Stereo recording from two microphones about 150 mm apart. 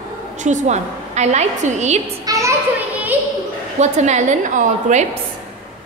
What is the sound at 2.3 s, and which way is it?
Children playing, 20° right (ahead or behind).